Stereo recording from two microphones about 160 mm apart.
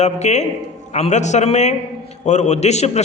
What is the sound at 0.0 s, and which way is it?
A man's voice, 45° left (ahead or behind).